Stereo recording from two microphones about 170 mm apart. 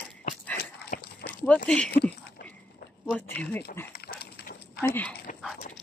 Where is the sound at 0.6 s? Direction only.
60° left (ahead or behind).